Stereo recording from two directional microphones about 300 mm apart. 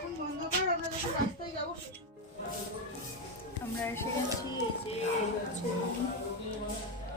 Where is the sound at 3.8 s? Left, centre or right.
Centre.